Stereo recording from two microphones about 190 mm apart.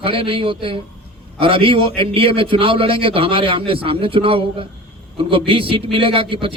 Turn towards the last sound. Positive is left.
turn(degrees=-30)  # may be behind; listen again after turning